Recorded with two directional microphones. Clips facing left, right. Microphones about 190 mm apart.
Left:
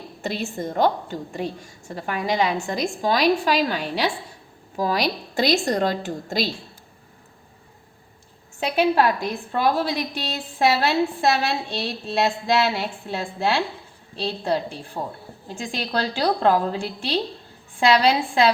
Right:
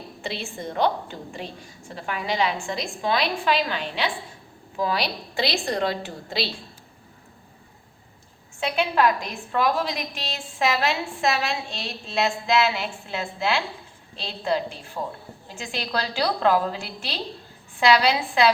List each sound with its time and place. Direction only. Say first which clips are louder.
0.2 s a woman's voice: left 5 dB; 45° left (ahead or behind)
8.6 s a woman's voice: left 3 dB; 40° left (ahead or behind)
15.0 s a woman's voice: even; 25° left (ahead or behind)
17.7 s a woman's voice: left 2 dB; 30° left (ahead or behind)